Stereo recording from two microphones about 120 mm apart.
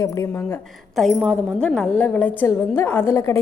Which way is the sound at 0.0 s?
25° left (ahead or behind).